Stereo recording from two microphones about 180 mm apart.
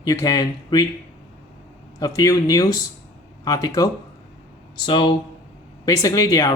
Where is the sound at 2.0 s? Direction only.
20° left (ahead or behind).